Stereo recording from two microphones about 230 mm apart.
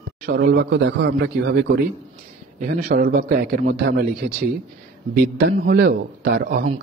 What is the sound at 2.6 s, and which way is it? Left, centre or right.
A man's voice, right.